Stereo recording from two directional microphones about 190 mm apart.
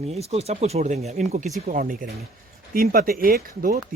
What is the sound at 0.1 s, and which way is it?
Speech, 35° right (ahead or behind).